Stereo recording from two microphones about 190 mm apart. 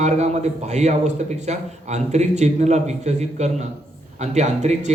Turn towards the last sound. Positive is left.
turn(degrees=-35)  # may be behind; listen again after turning